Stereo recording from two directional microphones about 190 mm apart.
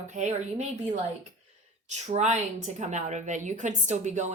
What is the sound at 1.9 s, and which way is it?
A woman's voice, 35° right (ahead or behind).